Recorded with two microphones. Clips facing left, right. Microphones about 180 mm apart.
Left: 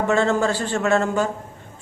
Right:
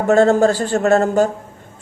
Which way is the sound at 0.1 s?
40° right (ahead or behind).